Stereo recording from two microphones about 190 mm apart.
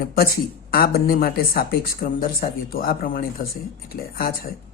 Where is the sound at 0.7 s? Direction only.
50° left (ahead or behind).